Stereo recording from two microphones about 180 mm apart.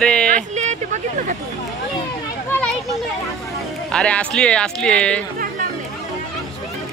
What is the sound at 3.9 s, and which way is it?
Speech, 5° left (ahead or behind).